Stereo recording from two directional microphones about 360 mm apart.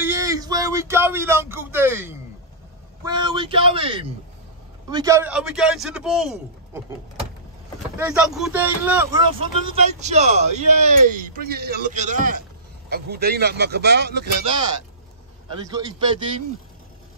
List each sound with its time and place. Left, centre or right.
0.0 s a man's voice: centre
8.0 s a man's voice: centre; by 14.2 s right
15.5 s a man's voice: centre